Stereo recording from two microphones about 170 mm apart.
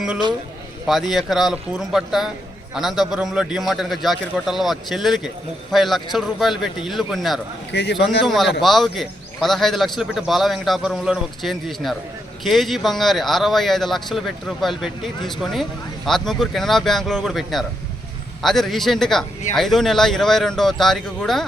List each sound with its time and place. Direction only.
0.9 s a man's voice: centre (ahead or behind)
7.7 s speech: 90° left
8.2 s a man's voice: centre (ahead or behind)